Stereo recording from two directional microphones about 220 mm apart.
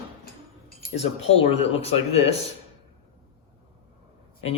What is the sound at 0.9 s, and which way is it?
Speech, 30° left (ahead or behind).